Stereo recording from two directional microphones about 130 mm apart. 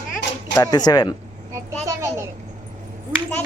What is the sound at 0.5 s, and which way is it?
Speech, 30° left (ahead or behind).